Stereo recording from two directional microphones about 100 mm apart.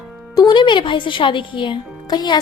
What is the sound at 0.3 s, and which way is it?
A woman's voice, 50° left (ahead or behind).